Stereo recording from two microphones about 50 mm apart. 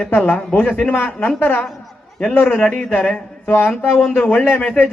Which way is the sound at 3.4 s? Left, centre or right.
Left.